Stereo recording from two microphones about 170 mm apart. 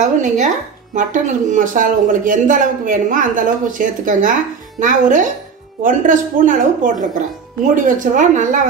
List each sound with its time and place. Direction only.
0.0 s speech: 45° right (ahead or behind)